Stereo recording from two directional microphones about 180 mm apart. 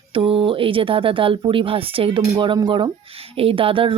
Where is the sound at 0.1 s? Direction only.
30° right (ahead or behind).